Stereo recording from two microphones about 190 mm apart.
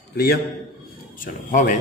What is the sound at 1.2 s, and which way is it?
Speech, 40° left (ahead or behind).